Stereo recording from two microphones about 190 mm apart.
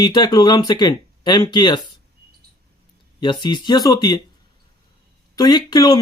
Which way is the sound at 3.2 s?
25° left (ahead or behind).